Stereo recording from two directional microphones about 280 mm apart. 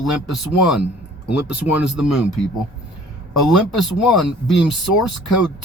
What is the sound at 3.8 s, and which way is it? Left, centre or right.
Speech, centre.